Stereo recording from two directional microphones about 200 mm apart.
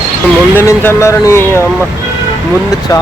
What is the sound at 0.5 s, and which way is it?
Speech, 10° left (ahead or behind).